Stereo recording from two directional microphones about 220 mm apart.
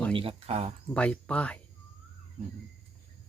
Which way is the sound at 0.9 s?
5° left (ahead or behind).